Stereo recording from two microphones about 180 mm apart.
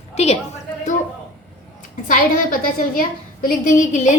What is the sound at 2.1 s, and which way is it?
A woman's voice, 50° left (ahead or behind).